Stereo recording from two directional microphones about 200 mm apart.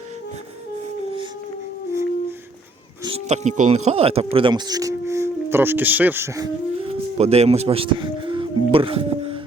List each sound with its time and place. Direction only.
3.0 s speech: 30° right (ahead or behind); by 6.5 s 15° right (ahead or behind)
6.8 s speech: 30° right (ahead or behind)